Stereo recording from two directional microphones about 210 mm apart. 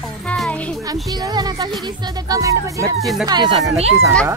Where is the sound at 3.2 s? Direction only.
20° right (ahead or behind).